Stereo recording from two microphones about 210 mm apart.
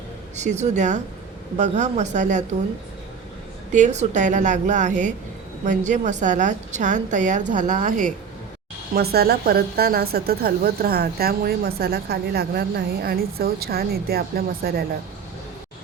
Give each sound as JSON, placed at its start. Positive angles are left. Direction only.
{"t": 0.3, "sound": "a woman's voice", "side_deg": -35}
{"t": 3.7, "sound": "a woman's voice", "side_deg": -35}
{"t": 9.0, "sound": "a woman's voice", "side_deg": -50}